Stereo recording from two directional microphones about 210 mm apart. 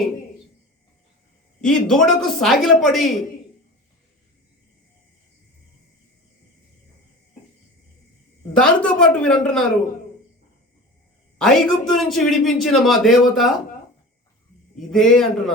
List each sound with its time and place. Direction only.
1.6 s a woman's voice: centre (ahead or behind)
8.5 s a woman's voice: 5° left (ahead or behind)
11.3 s a woman's voice: centre (ahead or behind)
14.8 s a woman's voice: centre (ahead or behind)